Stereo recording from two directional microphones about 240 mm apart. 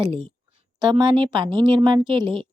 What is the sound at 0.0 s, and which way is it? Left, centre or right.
A woman's voice, right.